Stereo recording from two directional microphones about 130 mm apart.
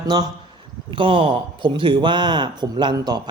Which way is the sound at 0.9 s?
45° right (ahead or behind).